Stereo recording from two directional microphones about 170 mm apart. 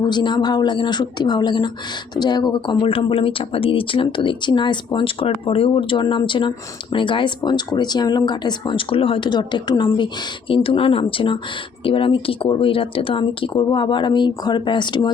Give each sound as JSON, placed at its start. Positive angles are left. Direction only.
{"t": 0.0, "sound": "speech", "side_deg": 25}